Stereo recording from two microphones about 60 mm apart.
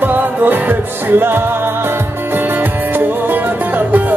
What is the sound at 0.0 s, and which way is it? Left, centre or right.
Music, right.